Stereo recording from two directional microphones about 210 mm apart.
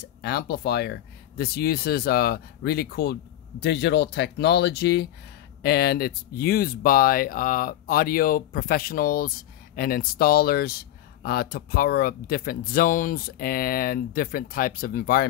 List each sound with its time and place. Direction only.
0.2 s speech: 50° left (ahead or behind)